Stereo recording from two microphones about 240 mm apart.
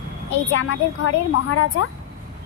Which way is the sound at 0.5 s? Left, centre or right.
Left.